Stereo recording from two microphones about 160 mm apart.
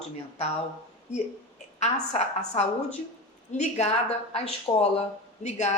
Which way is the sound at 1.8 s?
45° left (ahead or behind).